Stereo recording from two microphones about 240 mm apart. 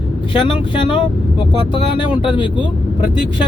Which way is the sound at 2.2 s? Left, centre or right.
Left.